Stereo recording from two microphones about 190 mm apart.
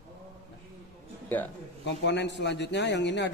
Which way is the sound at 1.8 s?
65° left (ahead or behind).